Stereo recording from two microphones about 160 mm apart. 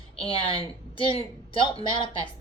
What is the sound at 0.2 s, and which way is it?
Speech, 35° left (ahead or behind).